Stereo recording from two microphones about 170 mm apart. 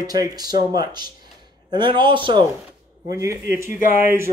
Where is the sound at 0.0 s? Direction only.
20° right (ahead or behind).